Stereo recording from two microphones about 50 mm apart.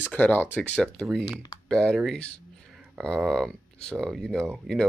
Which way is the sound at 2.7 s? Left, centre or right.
Centre.